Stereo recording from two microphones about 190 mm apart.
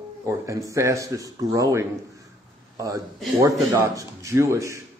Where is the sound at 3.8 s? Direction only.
15° right (ahead or behind).